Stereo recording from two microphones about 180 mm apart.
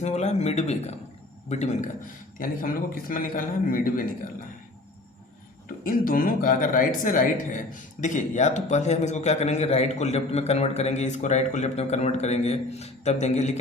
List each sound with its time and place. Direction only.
0.0 s speech: 40° left (ahead or behind)
2.4 s a man's voice: 50° left (ahead or behind)
5.8 s speech: 50° left (ahead or behind)